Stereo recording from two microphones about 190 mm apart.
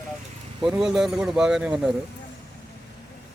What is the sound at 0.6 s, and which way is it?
Speech, 5° right (ahead or behind).